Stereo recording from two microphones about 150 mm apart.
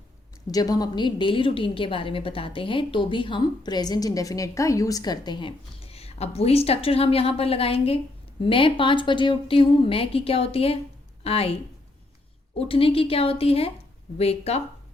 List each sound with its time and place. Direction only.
0.5 s a woman's voice: 25° left (ahead or behind)
12.5 s a woman's voice: 40° left (ahead or behind)